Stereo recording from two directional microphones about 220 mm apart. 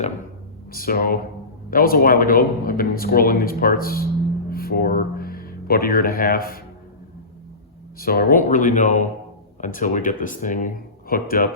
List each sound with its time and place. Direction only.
0.7 s speech: 40° left (ahead or behind)
7.9 s speech: 40° left (ahead or behind)